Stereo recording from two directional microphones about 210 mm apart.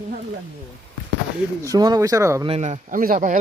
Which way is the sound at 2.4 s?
30° right (ahead or behind).